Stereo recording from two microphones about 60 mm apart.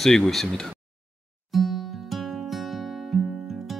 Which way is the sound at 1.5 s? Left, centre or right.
Centre.